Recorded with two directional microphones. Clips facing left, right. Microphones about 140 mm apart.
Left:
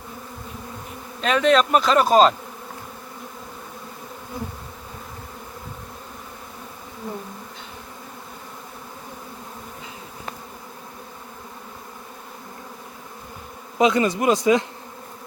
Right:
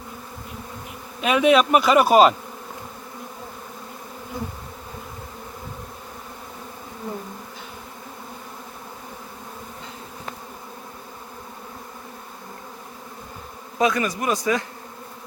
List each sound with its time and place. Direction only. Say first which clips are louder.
1.2 s speech: right 1 dB; 10° right (ahead or behind)
13.7 s a man's voice: left 3 dB; 25° left (ahead or behind)